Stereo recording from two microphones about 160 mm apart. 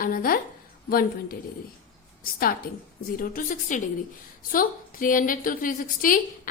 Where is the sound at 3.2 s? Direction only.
55° left (ahead or behind).